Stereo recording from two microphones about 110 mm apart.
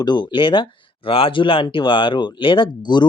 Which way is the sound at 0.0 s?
40° left (ahead or behind).